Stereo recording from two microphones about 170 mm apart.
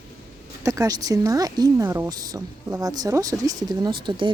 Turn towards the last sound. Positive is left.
turn(degrees=-25)  # may be behind; listen again after turning